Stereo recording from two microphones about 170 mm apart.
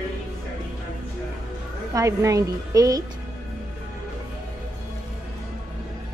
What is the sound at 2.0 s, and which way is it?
A woman's voice, 20° right (ahead or behind).